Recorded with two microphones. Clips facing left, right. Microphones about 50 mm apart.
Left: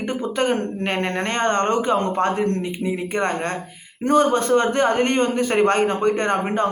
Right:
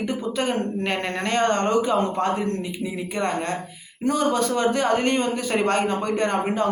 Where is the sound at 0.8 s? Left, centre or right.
Left.